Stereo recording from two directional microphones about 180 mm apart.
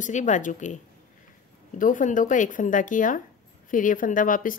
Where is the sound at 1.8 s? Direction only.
45° left (ahead or behind).